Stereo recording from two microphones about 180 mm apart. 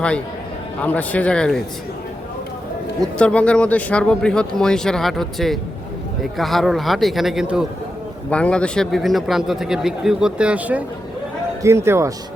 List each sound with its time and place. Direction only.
0.8 s speech: 10° left (ahead or behind)
3.0 s speech: 5° left (ahead or behind); by 12.1 s 15° right (ahead or behind)